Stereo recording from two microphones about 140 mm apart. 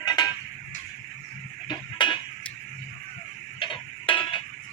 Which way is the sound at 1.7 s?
35° left (ahead or behind).